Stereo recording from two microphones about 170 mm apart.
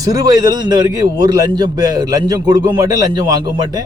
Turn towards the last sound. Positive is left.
turn(degrees=-25)  # may be behind; listen again after turning